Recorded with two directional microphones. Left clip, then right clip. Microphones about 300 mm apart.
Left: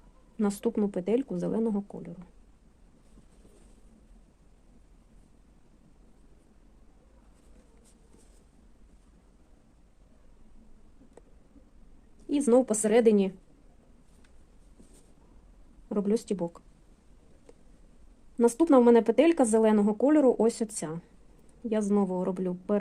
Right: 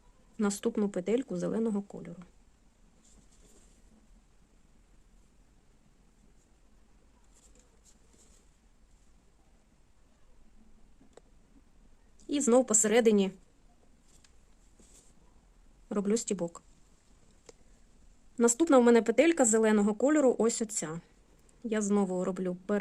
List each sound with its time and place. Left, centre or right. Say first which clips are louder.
0.3 s speech: left 2 dB; centre
12.3 s speech: left 2 dB; centre
15.9 s speech: left 2 dB; centre
17.5 s a sound: right 1 dB; centre
18.3 s speech: left 2 dB; centre